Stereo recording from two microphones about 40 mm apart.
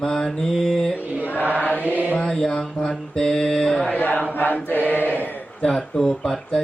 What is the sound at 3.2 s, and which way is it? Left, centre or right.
Mantra, centre.